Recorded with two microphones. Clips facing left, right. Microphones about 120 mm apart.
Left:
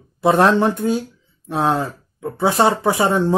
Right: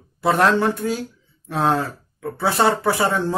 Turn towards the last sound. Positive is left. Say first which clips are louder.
# left 3 dB
turn(degrees=20)  # may be behind; listen again after turning